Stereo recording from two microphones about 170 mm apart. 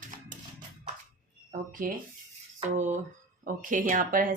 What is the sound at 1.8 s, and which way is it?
Speech, 55° right (ahead or behind).